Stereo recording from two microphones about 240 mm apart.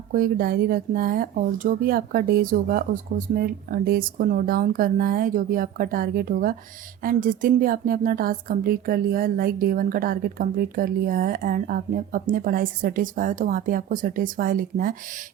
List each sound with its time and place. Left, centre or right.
0.1 s speech: right